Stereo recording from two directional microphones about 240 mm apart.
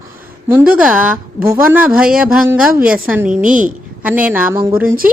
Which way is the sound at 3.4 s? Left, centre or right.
Right.